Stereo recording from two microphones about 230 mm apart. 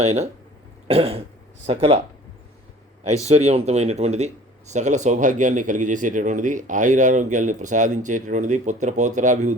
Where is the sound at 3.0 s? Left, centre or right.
Right.